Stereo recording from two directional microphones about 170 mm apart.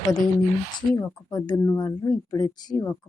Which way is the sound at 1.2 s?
25° left (ahead or behind).